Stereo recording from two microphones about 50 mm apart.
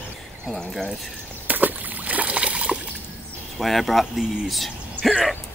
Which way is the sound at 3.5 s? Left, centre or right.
Centre.